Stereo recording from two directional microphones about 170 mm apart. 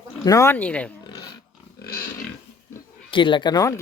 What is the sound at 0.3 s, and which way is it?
Speech, 15° left (ahead or behind).